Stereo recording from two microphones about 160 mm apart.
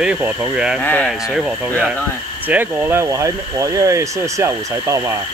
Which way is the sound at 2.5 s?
10° right (ahead or behind).